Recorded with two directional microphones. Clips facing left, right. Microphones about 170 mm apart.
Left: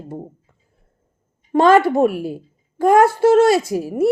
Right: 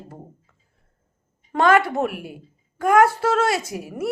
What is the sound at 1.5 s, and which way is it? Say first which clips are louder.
A woman's voice: left 5 dB; 25° left (ahead or behind).